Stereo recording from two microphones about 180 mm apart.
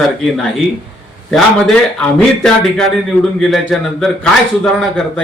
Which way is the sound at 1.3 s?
5° left (ahead or behind).